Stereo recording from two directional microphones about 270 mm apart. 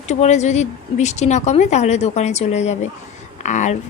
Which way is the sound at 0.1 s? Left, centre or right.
Left.